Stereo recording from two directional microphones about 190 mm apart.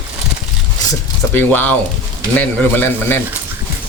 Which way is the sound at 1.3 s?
10° left (ahead or behind).